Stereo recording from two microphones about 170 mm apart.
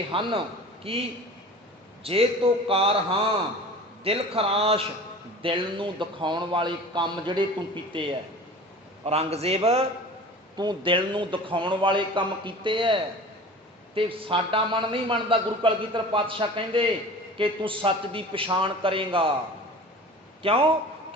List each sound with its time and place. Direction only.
0.1 s a man's voice: 30° right (ahead or behind)
2.0 s a man's voice: 35° right (ahead or behind)
20.4 s a man's voice: 30° right (ahead or behind)